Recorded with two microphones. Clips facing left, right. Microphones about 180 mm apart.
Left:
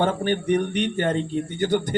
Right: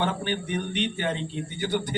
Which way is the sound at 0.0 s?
40° left (ahead or behind).